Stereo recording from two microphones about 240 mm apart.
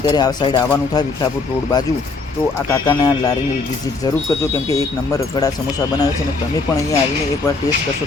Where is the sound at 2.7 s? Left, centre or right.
Centre.